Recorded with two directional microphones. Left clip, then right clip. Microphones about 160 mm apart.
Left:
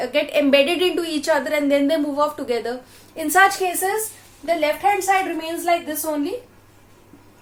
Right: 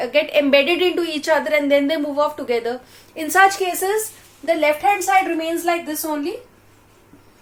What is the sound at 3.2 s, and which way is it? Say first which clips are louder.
Speech: right 1 dB; 20° right (ahead or behind).